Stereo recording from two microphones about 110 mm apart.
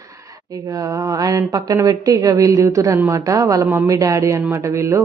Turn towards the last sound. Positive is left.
turn(degrees=-25)  # may be behind; listen again after turning